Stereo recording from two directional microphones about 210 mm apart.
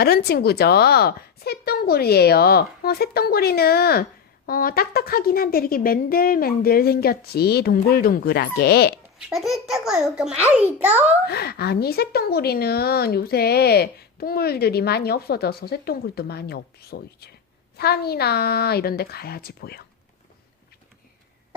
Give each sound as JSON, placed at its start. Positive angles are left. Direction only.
{"t": 0.0, "sound": "a woman's voice", "side_deg": 50}
{"t": 9.3, "sound": "a child's voice", "side_deg": 0}
{"t": 11.3, "sound": "a woman's voice", "side_deg": 50}